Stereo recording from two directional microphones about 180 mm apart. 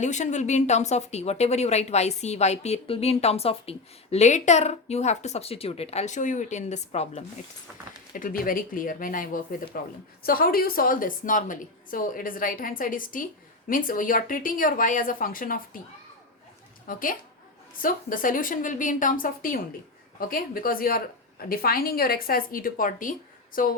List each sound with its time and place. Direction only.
0.0 s speech: 40° left (ahead or behind)
8.1 s a woman's voice: 50° left (ahead or behind)
16.8 s a woman's voice: 50° left (ahead or behind)